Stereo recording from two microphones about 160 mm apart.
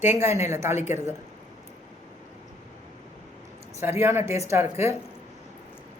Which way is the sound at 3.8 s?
15° right (ahead or behind).